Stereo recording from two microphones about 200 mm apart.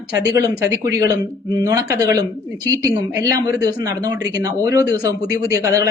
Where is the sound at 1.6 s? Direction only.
15° right (ahead or behind).